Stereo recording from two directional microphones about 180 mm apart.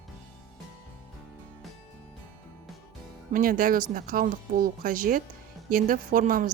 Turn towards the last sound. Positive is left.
turn(degrees=-50)  # may be behind; listen again after turning